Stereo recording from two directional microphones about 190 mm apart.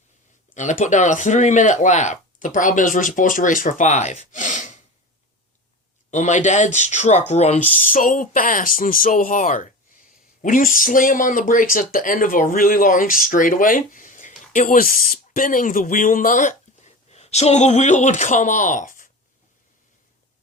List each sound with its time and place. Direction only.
0.5 s speech: 40° left (ahead or behind)
6.1 s speech: 40° left (ahead or behind)